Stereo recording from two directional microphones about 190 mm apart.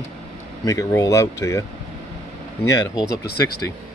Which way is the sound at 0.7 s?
15° left (ahead or behind).